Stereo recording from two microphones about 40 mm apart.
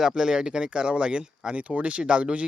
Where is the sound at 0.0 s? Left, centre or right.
Centre.